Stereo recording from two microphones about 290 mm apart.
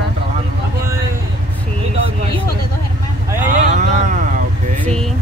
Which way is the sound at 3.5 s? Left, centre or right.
Right.